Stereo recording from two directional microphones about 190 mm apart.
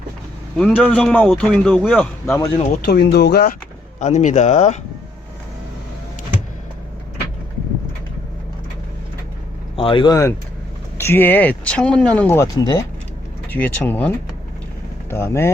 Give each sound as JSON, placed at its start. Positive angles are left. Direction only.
{"t": 0.5, "sound": "speech", "side_deg": 5}
{"t": 2.8, "sound": "speech", "side_deg": 60}
{"t": 4.0, "sound": "speech", "side_deg": 40}
{"t": 9.7, "sound": "speech", "side_deg": 30}
{"t": 15.1, "sound": "speech", "side_deg": 15}